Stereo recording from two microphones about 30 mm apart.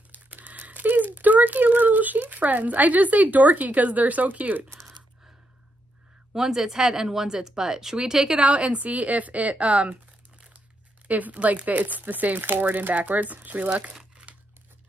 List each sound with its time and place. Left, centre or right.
0.1 s typing: right
6.3 s speech: centre
8.4 s a woman's voice: right
11.1 s speech: right